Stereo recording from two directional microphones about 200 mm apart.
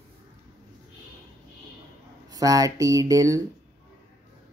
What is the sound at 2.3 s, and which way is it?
Speech, 20° right (ahead or behind).